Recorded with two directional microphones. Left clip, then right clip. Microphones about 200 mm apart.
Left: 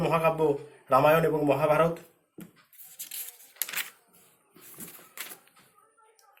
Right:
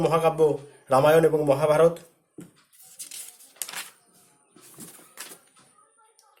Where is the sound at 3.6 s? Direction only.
15° right (ahead or behind).